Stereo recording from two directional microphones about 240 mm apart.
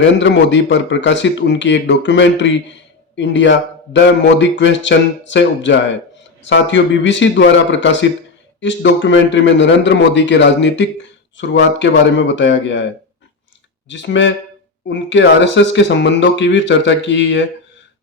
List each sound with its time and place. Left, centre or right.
0.0 s speech: left
13.8 s speech: left